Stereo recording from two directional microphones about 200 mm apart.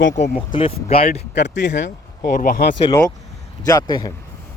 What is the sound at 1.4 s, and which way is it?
Speech, 60° left (ahead or behind).